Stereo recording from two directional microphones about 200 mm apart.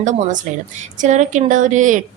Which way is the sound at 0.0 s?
40° right (ahead or behind).